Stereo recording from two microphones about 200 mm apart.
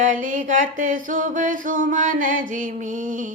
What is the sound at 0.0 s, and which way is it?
Mantra, 40° right (ahead or behind).